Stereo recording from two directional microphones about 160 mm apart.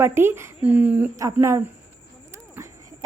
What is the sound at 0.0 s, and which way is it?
A woman's voice, 15° right (ahead or behind).